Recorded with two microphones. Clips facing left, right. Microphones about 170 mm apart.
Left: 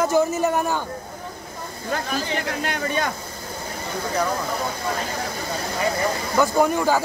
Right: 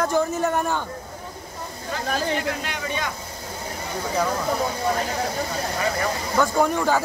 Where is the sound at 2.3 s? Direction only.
45° left (ahead or behind).